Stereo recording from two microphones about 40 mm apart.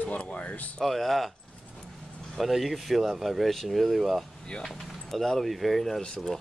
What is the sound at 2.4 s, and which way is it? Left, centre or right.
Speech, centre.